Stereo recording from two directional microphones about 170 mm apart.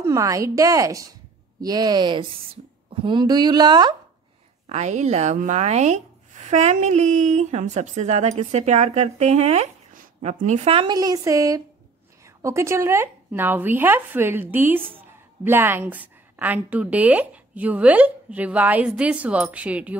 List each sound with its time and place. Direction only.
0.0 s a woman's voice: 20° right (ahead or behind)
4.6 s a woman's voice: 45° right (ahead or behind); by 20.0 s 10° right (ahead or behind)